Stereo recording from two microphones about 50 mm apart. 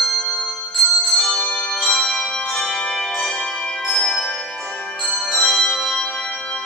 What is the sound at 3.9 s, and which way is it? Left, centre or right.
Music, centre.